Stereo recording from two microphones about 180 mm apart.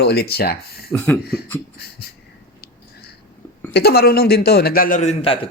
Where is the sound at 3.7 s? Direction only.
60° left (ahead or behind); by 5.1 s 45° left (ahead or behind).